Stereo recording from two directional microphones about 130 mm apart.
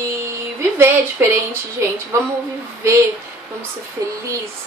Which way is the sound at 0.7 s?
20° right (ahead or behind).